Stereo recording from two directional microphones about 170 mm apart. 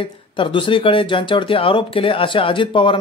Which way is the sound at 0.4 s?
30° left (ahead or behind).